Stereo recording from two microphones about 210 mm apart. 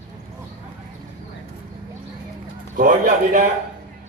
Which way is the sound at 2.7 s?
40° right (ahead or behind).